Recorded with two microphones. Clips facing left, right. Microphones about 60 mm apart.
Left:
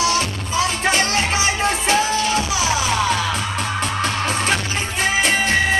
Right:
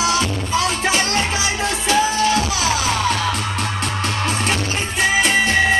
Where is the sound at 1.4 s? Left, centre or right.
Left.